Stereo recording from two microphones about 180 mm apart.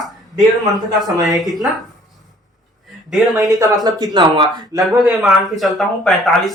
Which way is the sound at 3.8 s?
20° right (ahead or behind).